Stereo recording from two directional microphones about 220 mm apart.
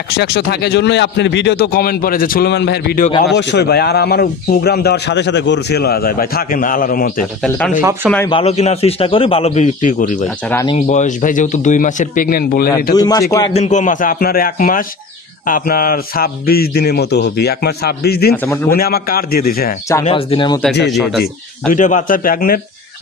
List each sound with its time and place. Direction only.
0.1 s speech: 50° left (ahead or behind)
7.4 s a man's voice: centre (ahead or behind)
8.3 s a man's voice: 25° left (ahead or behind)
10.5 s a man's voice: 15° left (ahead or behind)
10.9 s a man's voice: 35° left (ahead or behind)
12.9 s a man's voice: 15° left (ahead or behind)
13.5 s a man's voice: 30° left (ahead or behind)
18.3 s a man's voice: 10° left (ahead or behind)
18.7 s speech: 45° left (ahead or behind)
19.9 s a man's voice: 20° left (ahead or behind)
20.8 s a man's voice: centre (ahead or behind)
21.2 s a man's voice: 35° left (ahead or behind)